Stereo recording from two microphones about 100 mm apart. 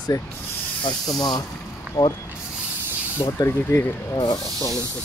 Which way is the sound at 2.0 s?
35° left (ahead or behind).